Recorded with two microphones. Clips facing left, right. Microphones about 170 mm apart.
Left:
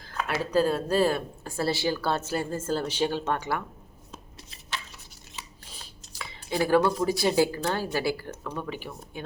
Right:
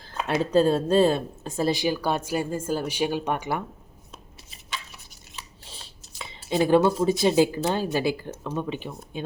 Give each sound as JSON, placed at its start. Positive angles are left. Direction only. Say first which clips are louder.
{"t": 0.0, "sound": "speech", "louder": "right 4 dB", "side_deg": -25}
{"t": 5.6, "sound": "a sound", "louder": "right 1 dB", "side_deg": -25}
{"t": 7.0, "sound": "speech", "louder": "right 3 dB", "side_deg": -20}